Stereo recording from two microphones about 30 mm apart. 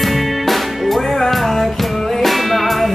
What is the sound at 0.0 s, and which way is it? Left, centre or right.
Music, centre.